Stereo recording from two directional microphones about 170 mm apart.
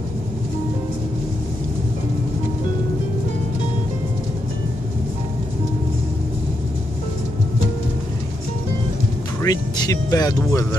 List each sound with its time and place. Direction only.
9.4 s speech: 20° left (ahead or behind)